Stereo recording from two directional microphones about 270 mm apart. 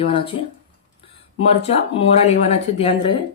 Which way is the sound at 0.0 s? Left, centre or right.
Centre.